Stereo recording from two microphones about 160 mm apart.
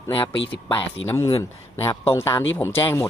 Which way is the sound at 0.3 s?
30° left (ahead or behind).